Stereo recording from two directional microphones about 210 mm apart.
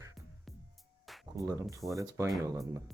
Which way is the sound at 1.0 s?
Centre (ahead or behind).